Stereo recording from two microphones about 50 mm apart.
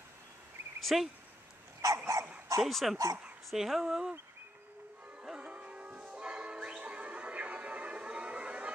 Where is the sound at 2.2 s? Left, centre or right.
Right.